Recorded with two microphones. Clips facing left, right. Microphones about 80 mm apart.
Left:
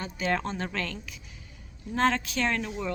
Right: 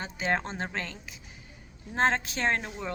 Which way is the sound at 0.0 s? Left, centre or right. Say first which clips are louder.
Left 1 dB; right.